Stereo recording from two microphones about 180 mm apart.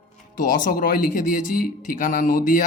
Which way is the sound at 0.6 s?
55° left (ahead or behind).